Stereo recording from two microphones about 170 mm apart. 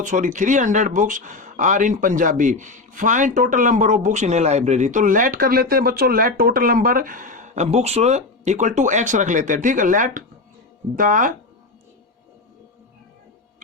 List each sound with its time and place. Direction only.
0.0 s speech: 45° right (ahead or behind)